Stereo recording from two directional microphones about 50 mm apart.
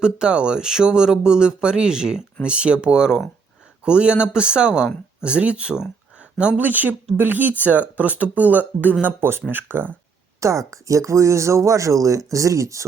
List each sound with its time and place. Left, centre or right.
0.0 s a man's voice: centre
6.6 s speech: right
10.4 s speech: right